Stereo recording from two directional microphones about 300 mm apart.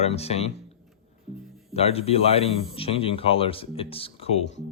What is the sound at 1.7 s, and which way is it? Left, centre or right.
A man's voice, centre.